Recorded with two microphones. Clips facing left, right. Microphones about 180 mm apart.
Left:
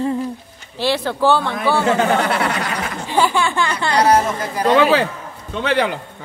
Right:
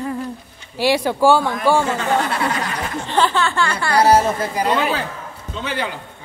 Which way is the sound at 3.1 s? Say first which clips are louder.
Left 1 dB; 10° left (ahead or behind).